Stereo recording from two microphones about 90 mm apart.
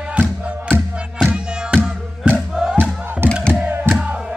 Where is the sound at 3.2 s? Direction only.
25° right (ahead or behind).